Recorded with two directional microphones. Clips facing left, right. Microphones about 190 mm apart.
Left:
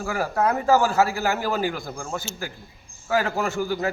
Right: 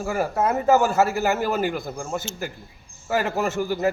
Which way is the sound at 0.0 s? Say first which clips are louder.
Right 2 dB; 20° right (ahead or behind).